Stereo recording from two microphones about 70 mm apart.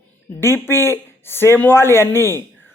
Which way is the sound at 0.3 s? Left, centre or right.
Left.